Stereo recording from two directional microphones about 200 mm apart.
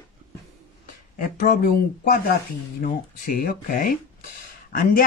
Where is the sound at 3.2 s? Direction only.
45° left (ahead or behind).